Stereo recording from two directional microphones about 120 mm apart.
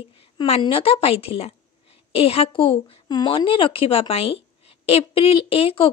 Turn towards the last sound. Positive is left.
turn(degrees=50)  # may be behind; listen again after turning